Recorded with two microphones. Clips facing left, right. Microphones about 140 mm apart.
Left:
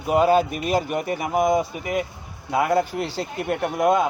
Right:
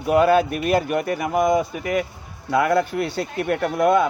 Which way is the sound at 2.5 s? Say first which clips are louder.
Right 2 dB; 75° right (ahead or behind).